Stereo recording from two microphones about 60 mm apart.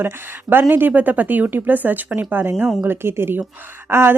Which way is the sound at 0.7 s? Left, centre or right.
Right.